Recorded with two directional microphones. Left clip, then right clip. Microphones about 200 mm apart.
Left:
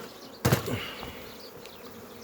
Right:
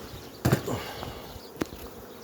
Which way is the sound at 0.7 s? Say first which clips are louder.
Right 1 dB; 15° left (ahead or behind).